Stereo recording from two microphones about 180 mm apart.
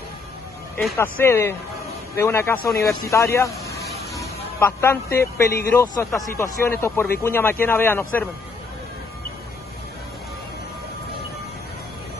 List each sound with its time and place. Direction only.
0.9 s speech: 10° left (ahead or behind)